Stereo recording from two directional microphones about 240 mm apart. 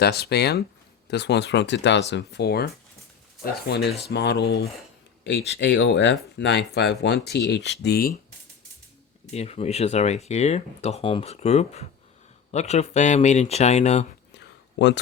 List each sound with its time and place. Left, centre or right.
0.0 s speech: left
3.8 s speech: left
9.3 s speech: left
14.3 s a sound: left